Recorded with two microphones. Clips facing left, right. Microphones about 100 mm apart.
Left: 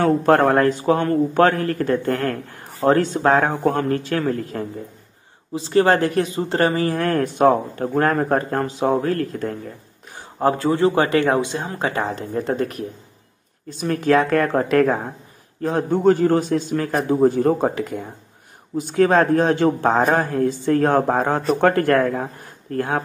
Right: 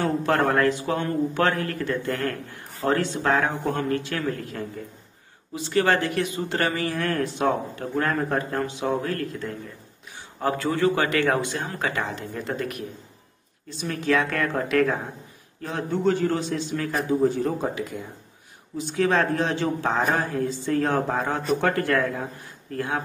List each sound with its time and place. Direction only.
0.2 s a man's voice: 45° left (ahead or behind)
10.1 s speech: 35° left (ahead or behind)
13.7 s a man's voice: 50° left (ahead or behind)